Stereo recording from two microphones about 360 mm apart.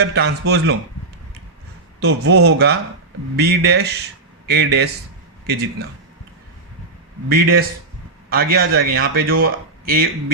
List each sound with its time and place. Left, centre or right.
0.1 s speech: right
2.0 s speech: right
7.3 s speech: right